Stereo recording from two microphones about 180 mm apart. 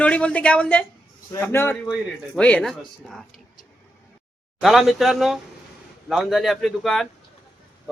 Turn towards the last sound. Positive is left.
turn(degrees=0)  # may be behind; listen again after turning